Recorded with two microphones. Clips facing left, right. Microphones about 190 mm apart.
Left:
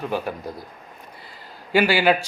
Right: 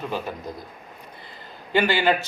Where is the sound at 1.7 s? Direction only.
10° left (ahead or behind).